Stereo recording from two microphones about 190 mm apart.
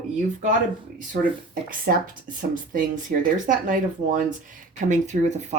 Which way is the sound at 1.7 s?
45° right (ahead or behind).